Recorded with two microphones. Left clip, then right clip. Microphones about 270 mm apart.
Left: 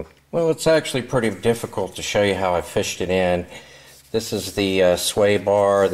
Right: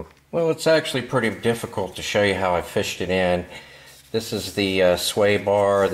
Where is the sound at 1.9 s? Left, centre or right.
Centre.